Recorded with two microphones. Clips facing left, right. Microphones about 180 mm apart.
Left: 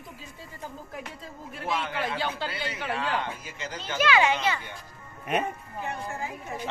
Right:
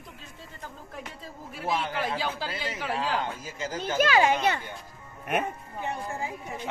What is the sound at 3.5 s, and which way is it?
Speech, 40° right (ahead or behind).